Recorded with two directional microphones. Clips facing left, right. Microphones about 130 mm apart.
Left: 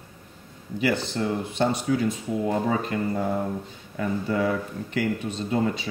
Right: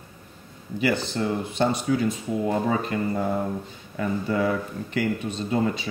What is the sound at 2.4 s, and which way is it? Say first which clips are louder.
A man's voice: right 1 dB; 25° right (ahead or behind).